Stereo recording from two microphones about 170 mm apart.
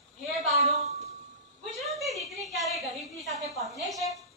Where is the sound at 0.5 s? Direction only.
40° right (ahead or behind).